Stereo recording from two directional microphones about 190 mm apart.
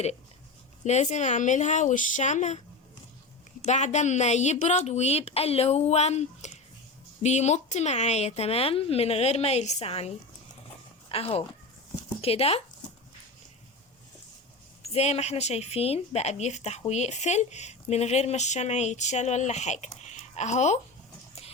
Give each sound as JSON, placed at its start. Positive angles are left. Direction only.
{"t": 0.9, "sound": "a woman's voice", "side_deg": 35}
{"t": 3.6, "sound": "a woman's voice", "side_deg": 35}
{"t": 11.1, "sound": "a woman's voice", "side_deg": 30}
{"t": 14.9, "sound": "a woman's voice", "side_deg": 35}